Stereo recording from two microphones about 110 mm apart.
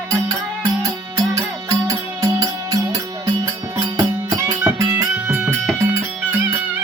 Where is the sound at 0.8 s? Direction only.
35° right (ahead or behind).